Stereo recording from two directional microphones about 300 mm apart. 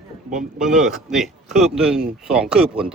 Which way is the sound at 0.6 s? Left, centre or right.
Centre.